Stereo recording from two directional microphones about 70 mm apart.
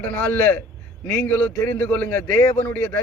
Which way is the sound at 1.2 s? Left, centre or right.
Left.